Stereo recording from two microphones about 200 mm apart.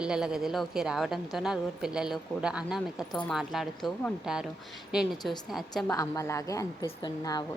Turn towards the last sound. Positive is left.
turn(degrees=20)  # may be behind; listen again after turning